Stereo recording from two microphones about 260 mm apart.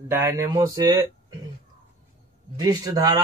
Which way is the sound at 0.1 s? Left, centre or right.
Centre.